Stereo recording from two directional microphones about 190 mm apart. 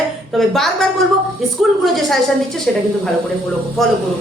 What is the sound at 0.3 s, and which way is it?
A woman's voice, centre (ahead or behind).